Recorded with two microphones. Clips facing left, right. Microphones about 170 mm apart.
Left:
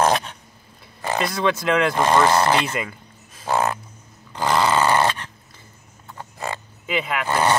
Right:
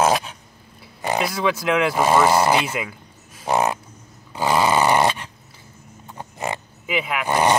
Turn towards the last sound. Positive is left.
turn(degrees=-15)  # may be behind; listen again after turning